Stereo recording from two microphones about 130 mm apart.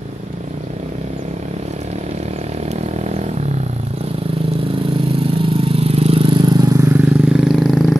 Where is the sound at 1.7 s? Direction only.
55° right (ahead or behind); by 7.2 s 20° right (ahead or behind).